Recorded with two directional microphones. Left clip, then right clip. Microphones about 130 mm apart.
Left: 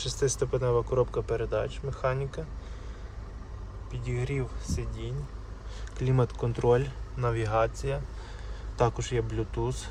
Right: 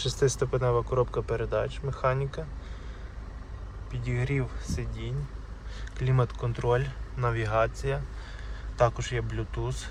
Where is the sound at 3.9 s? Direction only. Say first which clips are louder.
Right 2 dB; 25° left (ahead or behind).